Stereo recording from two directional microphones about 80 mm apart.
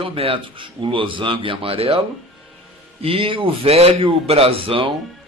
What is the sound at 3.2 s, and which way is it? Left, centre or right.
Speech, right.